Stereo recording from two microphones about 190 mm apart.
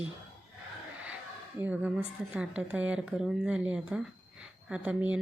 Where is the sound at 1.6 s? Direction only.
10° right (ahead or behind).